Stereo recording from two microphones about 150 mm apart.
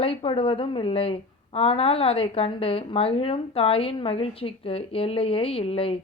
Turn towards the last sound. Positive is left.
turn(degrees=40)  # may be behind; listen again after turning